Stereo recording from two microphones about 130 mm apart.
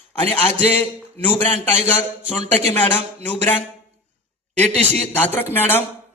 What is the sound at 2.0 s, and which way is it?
Speech, 50° right (ahead or behind).